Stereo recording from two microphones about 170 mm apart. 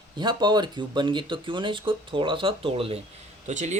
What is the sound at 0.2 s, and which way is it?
Speech, 25° right (ahead or behind).